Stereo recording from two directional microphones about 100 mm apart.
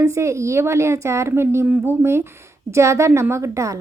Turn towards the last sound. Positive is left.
turn(degrees=-30)  # may be behind; listen again after turning